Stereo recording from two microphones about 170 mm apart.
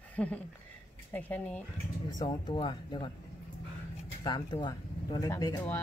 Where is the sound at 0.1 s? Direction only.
10° left (ahead or behind).